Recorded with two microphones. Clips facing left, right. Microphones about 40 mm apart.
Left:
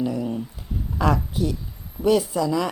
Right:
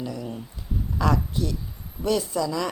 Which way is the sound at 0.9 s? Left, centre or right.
Centre.